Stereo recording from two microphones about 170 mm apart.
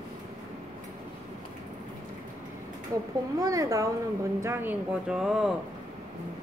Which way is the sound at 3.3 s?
20° right (ahead or behind).